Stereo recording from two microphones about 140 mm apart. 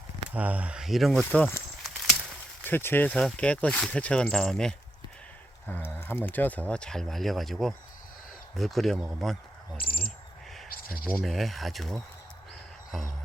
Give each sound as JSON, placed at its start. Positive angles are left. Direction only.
{"t": 0.3, "sound": "speech", "side_deg": -10}
{"t": 1.2, "sound": "speech", "side_deg": 10}
{"t": 2.6, "sound": "speech", "side_deg": 15}
{"t": 9.7, "sound": "speech", "side_deg": 90}
{"t": 10.7, "sound": "a sound", "side_deg": 90}
{"t": 11.2, "sound": "speech", "side_deg": 0}